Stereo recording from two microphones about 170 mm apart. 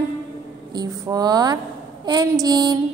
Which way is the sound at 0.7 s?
25° right (ahead or behind).